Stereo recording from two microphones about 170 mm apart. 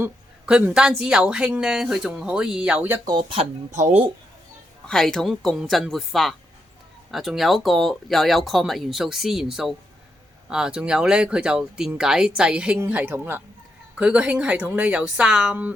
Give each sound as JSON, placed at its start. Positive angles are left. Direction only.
{"t": 0.0, "sound": "a woman's voice", "side_deg": -10}
{"t": 3.1, "sound": "speech", "side_deg": -30}
{"t": 4.9, "sound": "a woman's voice", "side_deg": 5}